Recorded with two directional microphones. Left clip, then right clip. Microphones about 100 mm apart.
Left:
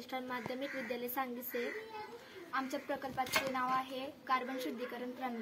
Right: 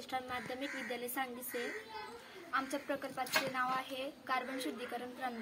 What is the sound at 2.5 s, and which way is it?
Speech, 50° right (ahead or behind).